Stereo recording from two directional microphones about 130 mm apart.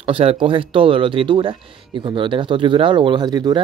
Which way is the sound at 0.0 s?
45° right (ahead or behind).